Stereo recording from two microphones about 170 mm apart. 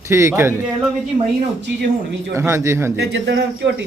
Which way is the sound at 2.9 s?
85° right.